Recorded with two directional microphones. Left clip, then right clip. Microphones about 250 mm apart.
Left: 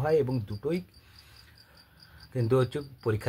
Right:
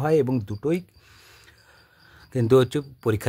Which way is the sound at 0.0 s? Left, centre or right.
Right.